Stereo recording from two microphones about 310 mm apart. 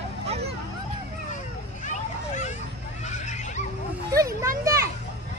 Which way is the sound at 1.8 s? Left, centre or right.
Left.